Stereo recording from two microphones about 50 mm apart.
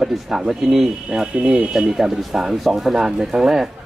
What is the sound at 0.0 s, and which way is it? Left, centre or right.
Speech, centre.